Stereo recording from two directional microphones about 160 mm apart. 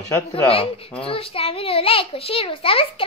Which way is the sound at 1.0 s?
35° left (ahead or behind).